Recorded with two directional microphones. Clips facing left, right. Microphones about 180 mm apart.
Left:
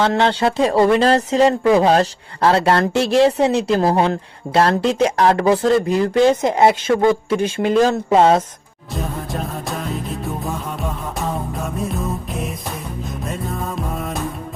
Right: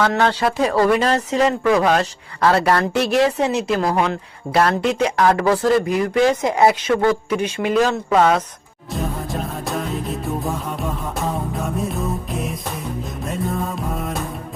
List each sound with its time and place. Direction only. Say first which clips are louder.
0.0 s speech: left 1 dB; 25° left (ahead or behind)
8.9 s music: right 1 dB; centre (ahead or behind)
13.2 s music: right 3 dB; centre (ahead or behind)